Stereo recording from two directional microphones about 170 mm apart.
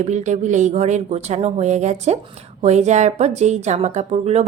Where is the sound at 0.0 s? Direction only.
45° right (ahead or behind).